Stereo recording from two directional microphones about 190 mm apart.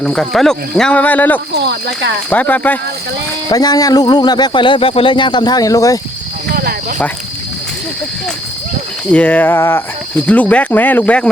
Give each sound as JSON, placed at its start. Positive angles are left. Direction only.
{"t": 0.0, "sound": "speech", "side_deg": 5}
{"t": 1.5, "sound": "speech", "side_deg": -65}
{"t": 2.3, "sound": "speech", "side_deg": 10}
{"t": 3.5, "sound": "speech", "side_deg": 20}
{"t": 6.5, "sound": "speech", "side_deg": -50}
{"t": 9.1, "sound": "speech", "side_deg": 10}